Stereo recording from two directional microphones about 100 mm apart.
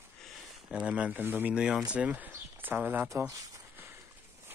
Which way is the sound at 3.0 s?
35° right (ahead or behind).